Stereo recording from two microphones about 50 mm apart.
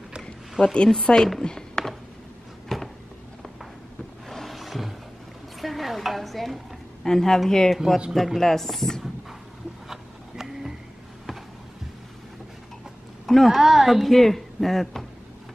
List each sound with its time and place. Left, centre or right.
0.6 s speech: centre
1.0 s a woman's voice: centre
1.4 s a sound: centre
4.3 s a sound: centre
5.6 s stir: centre
8.1 s speech: centre
9.8 s a sound: centre
13.3 s speech: centre
13.6 s speech: centre